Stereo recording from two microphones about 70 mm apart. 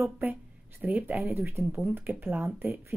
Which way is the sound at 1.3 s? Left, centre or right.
Right.